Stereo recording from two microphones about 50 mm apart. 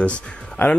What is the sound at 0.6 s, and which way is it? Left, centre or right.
Speech, left.